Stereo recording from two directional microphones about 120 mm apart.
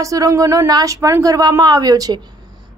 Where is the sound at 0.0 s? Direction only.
30° right (ahead or behind).